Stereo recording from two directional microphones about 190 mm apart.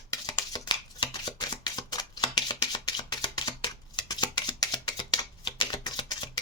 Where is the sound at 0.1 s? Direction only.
20° left (ahead or behind).